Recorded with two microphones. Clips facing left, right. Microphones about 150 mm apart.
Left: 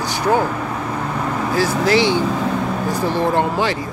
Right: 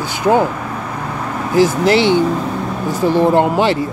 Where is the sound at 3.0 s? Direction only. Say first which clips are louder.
Right 7 dB; 15° right (ahead or behind).